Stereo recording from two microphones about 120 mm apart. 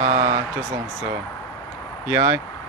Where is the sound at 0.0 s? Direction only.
65° right (ahead or behind).